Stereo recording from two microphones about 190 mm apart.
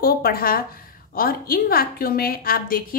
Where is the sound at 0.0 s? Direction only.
50° left (ahead or behind).